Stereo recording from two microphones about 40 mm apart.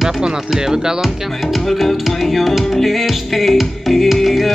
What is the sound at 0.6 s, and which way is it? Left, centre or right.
Speech, centre.